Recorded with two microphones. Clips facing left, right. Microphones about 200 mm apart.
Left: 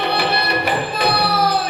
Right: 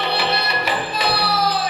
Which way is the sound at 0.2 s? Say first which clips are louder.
Left 3 dB; 55° left (ahead or behind).